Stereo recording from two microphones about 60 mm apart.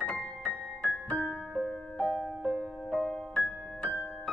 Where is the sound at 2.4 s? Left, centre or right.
Centre.